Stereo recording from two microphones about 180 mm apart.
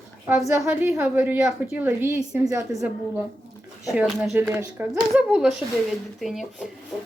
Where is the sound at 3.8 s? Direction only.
Centre (ahead or behind).